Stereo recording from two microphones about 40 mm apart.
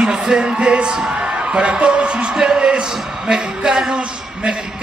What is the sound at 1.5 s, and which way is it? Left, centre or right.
A man's voice, right.